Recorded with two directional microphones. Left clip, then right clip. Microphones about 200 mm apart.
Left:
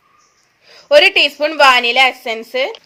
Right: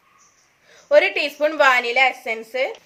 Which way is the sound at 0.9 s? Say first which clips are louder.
Left 7 dB; 35° left (ahead or behind).